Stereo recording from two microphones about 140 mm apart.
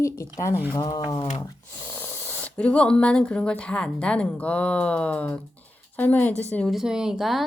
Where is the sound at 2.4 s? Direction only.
10° left (ahead or behind).